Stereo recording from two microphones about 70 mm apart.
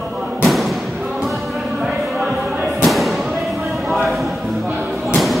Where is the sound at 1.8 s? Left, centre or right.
Centre.